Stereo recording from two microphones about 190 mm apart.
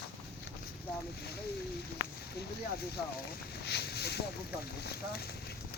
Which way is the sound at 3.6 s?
60° left (ahead or behind).